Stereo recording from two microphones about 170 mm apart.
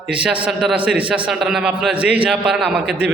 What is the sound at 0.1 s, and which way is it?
A man's voice, 5° right (ahead or behind).